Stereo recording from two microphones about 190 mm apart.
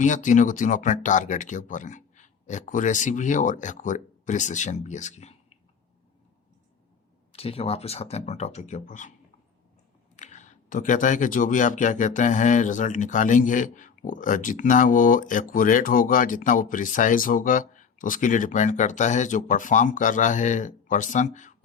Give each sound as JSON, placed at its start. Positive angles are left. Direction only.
{"t": 0.0, "sound": "speech", "side_deg": 40}
{"t": 7.3, "sound": "speech", "side_deg": 30}
{"t": 10.2, "sound": "speech", "side_deg": 40}